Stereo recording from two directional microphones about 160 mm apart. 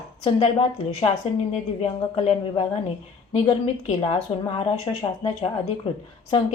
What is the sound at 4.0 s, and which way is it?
Speech, 30° left (ahead or behind).